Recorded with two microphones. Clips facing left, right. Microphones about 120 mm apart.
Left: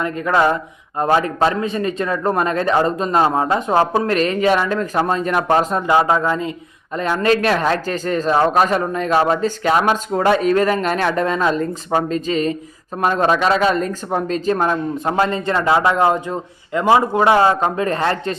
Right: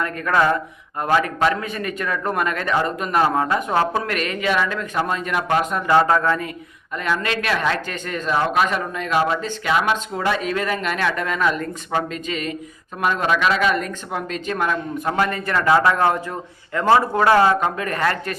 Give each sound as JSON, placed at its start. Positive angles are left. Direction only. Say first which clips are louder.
{"t": 0.0, "sound": "a man's voice", "louder": "left 3 dB", "side_deg": 20}
{"t": 5.9, "sound": "speech", "louder": "even", "side_deg": 15}
{"t": 6.9, "sound": "a man's voice", "louder": "left 6 dB", "side_deg": 35}